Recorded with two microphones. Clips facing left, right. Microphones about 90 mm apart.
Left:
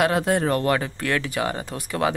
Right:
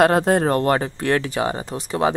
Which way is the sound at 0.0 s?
40° right (ahead or behind).